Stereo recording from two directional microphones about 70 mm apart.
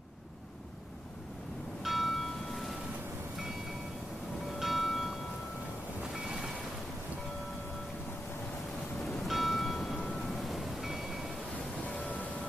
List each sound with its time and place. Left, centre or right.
1.8 s church bell: centre
4.6 s church bell: centre
6.2 s vehicle: centre
9.1 s church bell: centre
11.5 s music: centre